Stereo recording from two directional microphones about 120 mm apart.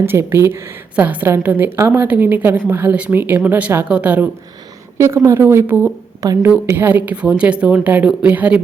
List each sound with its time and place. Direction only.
0.0 s a woman's voice: 20° right (ahead or behind)
4.9 s a woman's voice: 20° right (ahead or behind)
6.2 s a woman's voice: 25° right (ahead or behind)
6.7 s a woman's voice: 15° right (ahead or behind)